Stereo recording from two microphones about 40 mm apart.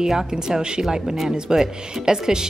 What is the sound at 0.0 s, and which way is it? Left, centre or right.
Speech, centre.